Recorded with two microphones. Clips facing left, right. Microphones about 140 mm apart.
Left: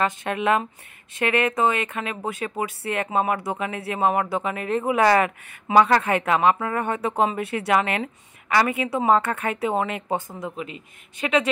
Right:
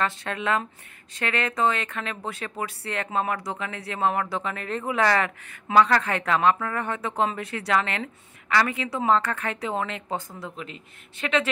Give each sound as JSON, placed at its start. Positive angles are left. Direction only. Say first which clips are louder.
{"t": 0.0, "sound": "a man's voice", "louder": "left 4 dB", "side_deg": 15}
{"t": 7.1, "sound": "a man's voice", "louder": "left 3 dB", "side_deg": 15}
{"t": 10.5, "sound": "a man's voice", "louder": "left 5 dB", "side_deg": 5}